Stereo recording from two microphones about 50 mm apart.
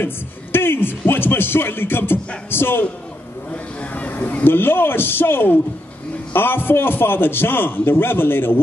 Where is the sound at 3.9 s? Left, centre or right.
Left.